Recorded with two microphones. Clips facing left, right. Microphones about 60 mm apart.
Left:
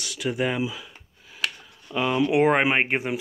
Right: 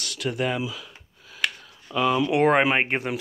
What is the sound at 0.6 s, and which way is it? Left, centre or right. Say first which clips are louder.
Speech: left 2 dB; left.